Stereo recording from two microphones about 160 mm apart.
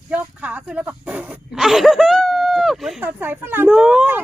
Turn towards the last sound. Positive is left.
turn(degrees=-5)  # may be behind; listen again after turning